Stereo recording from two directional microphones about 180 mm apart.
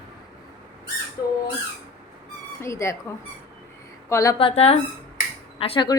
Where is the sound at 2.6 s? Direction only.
15° left (ahead or behind).